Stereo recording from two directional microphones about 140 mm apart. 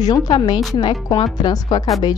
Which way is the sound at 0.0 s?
25° left (ahead or behind).